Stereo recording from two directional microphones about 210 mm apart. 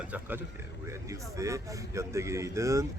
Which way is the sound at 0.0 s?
10° right (ahead or behind).